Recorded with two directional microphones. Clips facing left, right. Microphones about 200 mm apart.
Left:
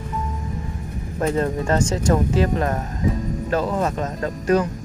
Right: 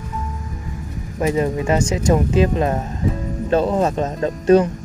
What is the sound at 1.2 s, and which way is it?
Speech, 10° right (ahead or behind).